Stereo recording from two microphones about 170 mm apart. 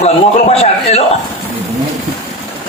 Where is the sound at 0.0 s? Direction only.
40° left (ahead or behind).